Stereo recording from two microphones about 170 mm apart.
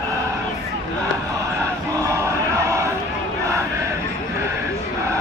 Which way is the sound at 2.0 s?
15° right (ahead or behind).